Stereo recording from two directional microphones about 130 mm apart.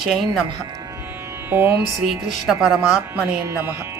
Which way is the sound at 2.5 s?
5° right (ahead or behind).